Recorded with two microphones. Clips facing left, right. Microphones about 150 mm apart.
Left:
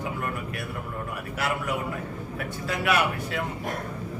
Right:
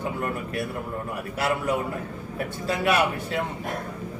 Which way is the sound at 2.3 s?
30° right (ahead or behind).